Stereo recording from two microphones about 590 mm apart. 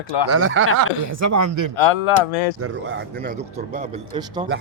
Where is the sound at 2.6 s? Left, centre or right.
Centre.